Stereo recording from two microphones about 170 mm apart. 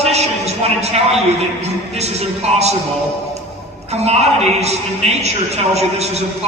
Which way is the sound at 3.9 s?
40° right (ahead or behind).